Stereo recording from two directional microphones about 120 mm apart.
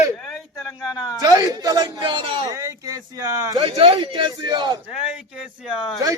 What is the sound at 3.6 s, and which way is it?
A man's voice, 50° right (ahead or behind).